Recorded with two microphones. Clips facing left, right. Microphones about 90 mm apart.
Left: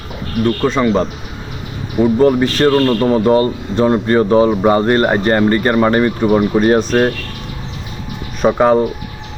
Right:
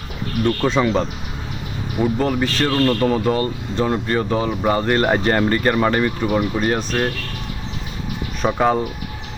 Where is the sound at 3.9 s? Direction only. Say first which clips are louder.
Left 9 dB; 35° left (ahead or behind).